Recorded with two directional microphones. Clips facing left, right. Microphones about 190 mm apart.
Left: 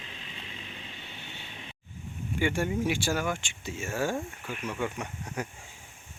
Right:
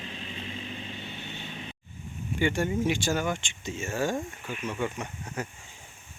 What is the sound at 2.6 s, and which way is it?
Speech, 10° left (ahead or behind).